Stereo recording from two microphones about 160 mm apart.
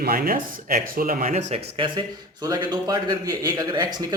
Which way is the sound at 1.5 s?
30° right (ahead or behind).